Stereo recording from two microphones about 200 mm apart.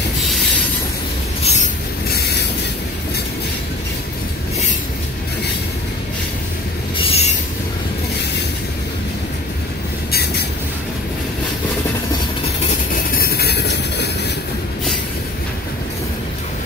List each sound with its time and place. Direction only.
7.0 s train: 30° left (ahead or behind)
12.9 s train: 50° left (ahead or behind)